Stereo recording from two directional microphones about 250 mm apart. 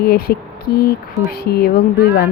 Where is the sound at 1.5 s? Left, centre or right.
Left.